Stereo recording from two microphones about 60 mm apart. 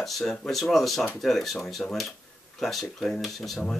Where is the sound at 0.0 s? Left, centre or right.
Centre.